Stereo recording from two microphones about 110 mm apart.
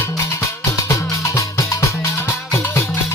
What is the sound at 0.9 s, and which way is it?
Music, 30° left (ahead or behind).